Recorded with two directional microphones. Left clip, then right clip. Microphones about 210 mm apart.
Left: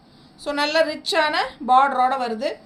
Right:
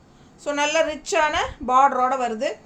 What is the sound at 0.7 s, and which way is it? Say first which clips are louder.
Speech: left 2 dB; 10° right (ahead or behind).